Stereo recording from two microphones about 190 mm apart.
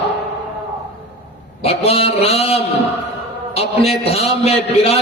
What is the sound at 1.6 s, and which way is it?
Mantra, 30° left (ahead or behind).